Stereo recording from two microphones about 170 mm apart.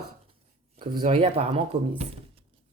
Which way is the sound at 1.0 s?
40° right (ahead or behind).